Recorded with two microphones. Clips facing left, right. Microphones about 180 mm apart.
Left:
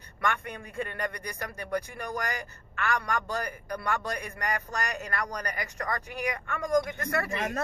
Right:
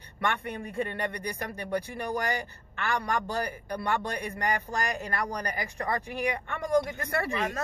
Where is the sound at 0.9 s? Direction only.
30° right (ahead or behind).